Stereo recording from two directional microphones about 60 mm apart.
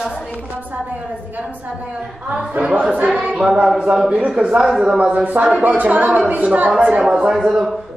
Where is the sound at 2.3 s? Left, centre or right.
Centre.